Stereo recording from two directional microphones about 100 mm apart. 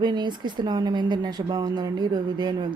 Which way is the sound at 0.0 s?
50° right (ahead or behind).